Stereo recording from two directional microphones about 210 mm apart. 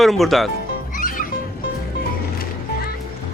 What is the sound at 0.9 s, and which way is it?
Music, 40° left (ahead or behind).